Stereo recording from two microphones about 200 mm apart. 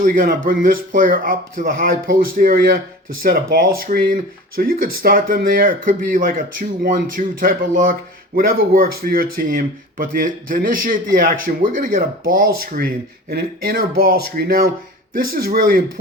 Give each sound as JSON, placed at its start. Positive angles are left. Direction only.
{"t": 0.0, "sound": "speech", "side_deg": -45}